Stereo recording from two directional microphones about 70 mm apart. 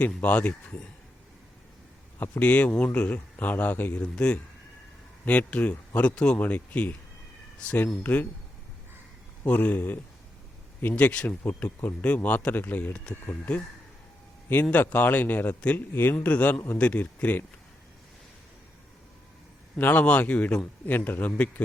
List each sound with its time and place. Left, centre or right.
0.0 s speech: left
2.1 s speech: left
4.0 s speech: centre
6.1 s speech: centre
6.4 s speech: left
9.4 s speech: left
11.4 s speech: left
19.8 s speech: left
20.8 s speech: left